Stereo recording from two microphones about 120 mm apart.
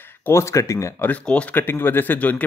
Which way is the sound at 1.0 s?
10° left (ahead or behind).